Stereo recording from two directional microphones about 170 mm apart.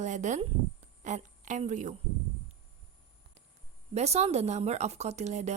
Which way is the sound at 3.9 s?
40° right (ahead or behind).